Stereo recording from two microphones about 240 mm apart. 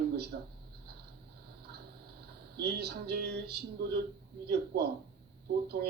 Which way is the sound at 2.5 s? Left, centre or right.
Right.